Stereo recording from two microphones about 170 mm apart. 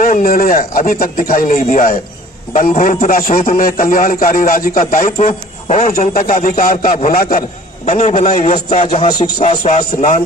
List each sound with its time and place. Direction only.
0.0 s a man's voice: 55° left (ahead or behind)
5.1 s a man's voice: 40° left (ahead or behind)
5.9 s a man's voice: 55° left (ahead or behind)
7.9 s a man's voice: 40° left (ahead or behind)